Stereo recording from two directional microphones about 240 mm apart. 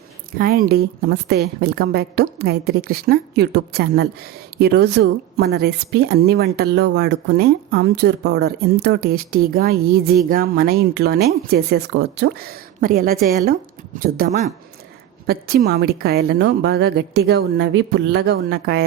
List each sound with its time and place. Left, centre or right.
0.3 s a woman's voice: right